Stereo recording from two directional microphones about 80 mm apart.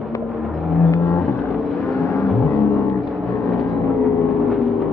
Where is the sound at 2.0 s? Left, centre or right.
Left.